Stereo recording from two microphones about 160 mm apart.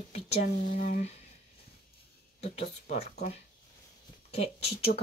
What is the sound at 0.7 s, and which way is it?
Speech, 55° left (ahead or behind).